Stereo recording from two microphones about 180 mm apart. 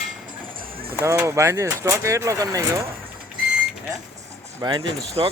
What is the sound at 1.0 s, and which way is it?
Speech, 15° right (ahead or behind).